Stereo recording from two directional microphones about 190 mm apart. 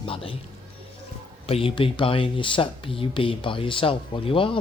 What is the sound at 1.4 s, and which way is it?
Speech, 30° left (ahead or behind).